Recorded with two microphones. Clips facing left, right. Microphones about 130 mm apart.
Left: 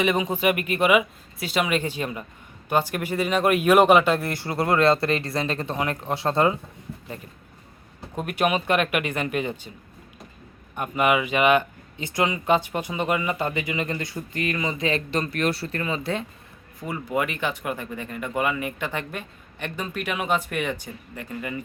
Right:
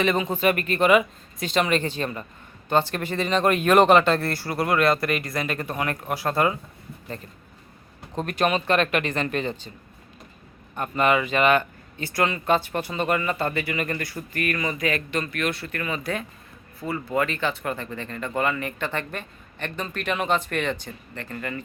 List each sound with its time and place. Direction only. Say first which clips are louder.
0.0 s speech: even; 15° left (ahead or behind)
8.1 s speech: even; 10° left (ahead or behind)
10.8 s speech: even; 10° left (ahead or behind)
16.8 s speech: right 1 dB; 15° left (ahead or behind)